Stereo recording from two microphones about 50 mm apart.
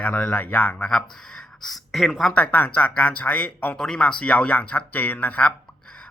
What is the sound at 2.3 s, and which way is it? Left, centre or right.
Speech, left.